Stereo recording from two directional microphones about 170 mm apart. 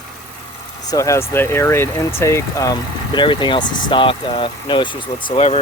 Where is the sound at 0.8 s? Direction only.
20° left (ahead or behind).